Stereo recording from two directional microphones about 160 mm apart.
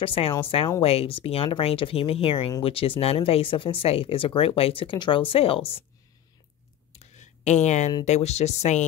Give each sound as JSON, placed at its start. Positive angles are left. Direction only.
{"t": 0.0, "sound": "speech", "side_deg": 35}
{"t": 6.9, "sound": "a sound", "side_deg": 45}
{"t": 8.0, "sound": "speech", "side_deg": 45}